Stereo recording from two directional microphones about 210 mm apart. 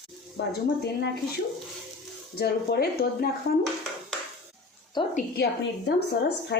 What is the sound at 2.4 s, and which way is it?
Speech, 50° left (ahead or behind).